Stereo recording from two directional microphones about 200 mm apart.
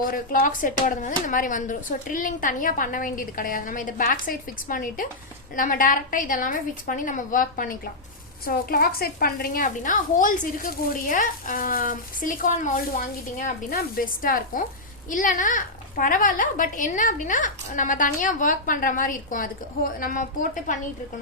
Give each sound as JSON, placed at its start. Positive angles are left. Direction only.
{"t": 0.0, "sound": "a woman's voice", "side_deg": 45}